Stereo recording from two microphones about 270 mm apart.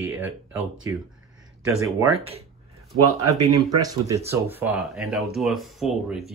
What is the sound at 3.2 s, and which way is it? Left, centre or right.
Speech, centre.